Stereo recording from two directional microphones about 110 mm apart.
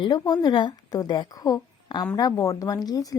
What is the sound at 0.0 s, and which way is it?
A woman's voice, 40° left (ahead or behind).